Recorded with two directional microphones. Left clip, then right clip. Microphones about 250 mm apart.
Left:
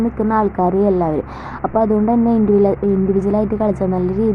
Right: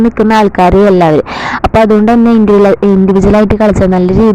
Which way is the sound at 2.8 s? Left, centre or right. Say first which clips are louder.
Right 9 dB; right.